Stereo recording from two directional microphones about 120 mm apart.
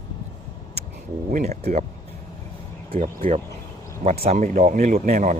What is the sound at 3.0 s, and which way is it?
A man's voice, 60° right (ahead or behind).